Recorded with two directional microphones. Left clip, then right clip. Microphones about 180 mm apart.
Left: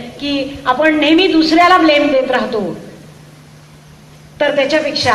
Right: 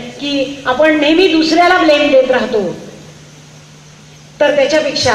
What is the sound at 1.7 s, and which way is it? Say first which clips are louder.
Speech: right 1 dB; 40° right (ahead or behind).